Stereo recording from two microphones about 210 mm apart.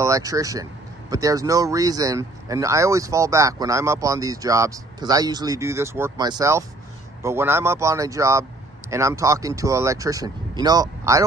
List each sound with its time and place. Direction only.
0.0 s speech: 15° right (ahead or behind)